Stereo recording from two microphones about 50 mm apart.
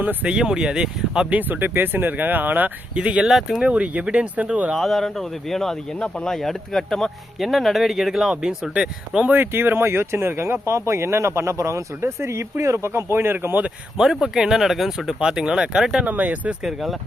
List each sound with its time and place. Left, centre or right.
0.0 s speech: right
0.3 s speech: centre
1.3 s speech: right
2.9 s speech: right
3.2 s speech: centre
3.7 s speech: right
4.8 s speech: centre
6.0 s speech: centre
6.3 s speech: centre
9.3 s speech: right
13.9 s speech: centre
16.0 s speech: right
16.6 s speech: centre